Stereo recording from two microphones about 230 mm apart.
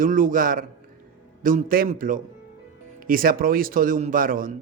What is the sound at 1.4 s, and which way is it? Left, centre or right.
A man's voice, right.